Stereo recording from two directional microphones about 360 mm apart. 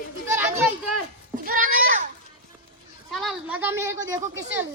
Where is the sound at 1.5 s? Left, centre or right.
Right.